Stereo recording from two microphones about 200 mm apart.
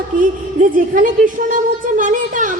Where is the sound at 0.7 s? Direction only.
40° right (ahead or behind).